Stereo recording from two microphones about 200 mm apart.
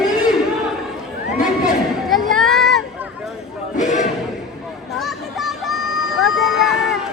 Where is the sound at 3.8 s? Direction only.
40° left (ahead or behind).